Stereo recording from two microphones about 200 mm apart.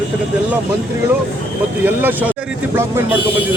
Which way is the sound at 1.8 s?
10° right (ahead or behind).